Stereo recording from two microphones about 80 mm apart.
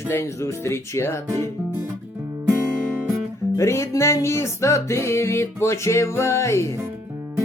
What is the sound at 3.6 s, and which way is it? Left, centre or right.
Music, left.